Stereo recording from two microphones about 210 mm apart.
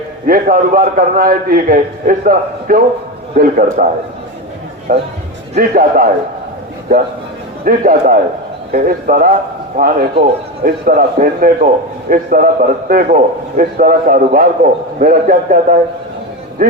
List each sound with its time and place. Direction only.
0.3 s a man's voice: 40° right (ahead or behind)
4.9 s a man's voice: 40° right (ahead or behind)
7.6 s a man's voice: 40° right (ahead or behind)